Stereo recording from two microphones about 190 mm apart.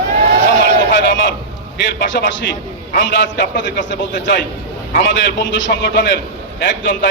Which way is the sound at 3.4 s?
65° left (ahead or behind).